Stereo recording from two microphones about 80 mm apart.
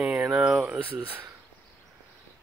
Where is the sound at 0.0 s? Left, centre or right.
Centre.